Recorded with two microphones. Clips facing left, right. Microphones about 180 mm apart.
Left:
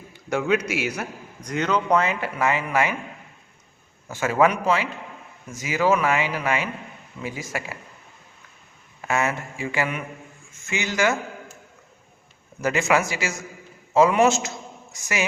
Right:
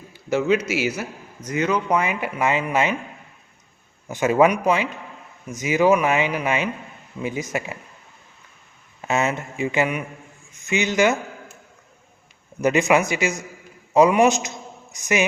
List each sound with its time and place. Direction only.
0.3 s a man's voice: 5° right (ahead or behind); by 2.9 s 20° right (ahead or behind)
4.1 s speech: 20° right (ahead or behind)
9.0 s speech: 20° right (ahead or behind)
12.6 s speech: 20° right (ahead or behind)